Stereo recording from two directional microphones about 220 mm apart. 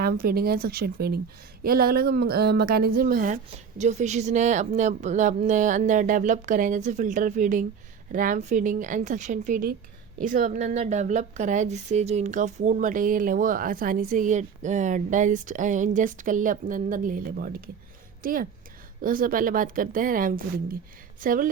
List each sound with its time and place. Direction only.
0.0 s a woman's voice: 45° right (ahead or behind)